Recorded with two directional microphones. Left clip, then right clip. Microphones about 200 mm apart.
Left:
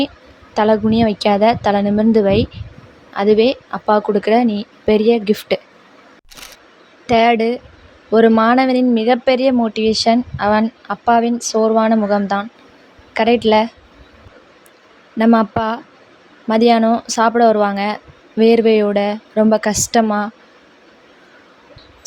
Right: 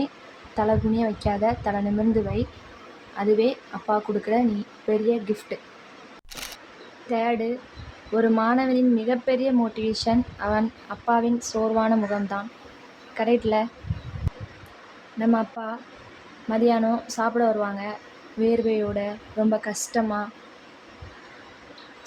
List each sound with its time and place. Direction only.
0.5 s a woman's voice: 40° left (ahead or behind)
6.3 s single-lens reflex camera: centre (ahead or behind)
7.1 s a woman's voice: 45° left (ahead or behind)
15.2 s a woman's voice: 50° left (ahead or behind)